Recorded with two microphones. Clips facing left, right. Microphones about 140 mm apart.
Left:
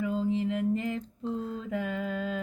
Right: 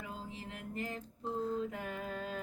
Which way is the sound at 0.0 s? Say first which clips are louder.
Left 17 dB; 90° left.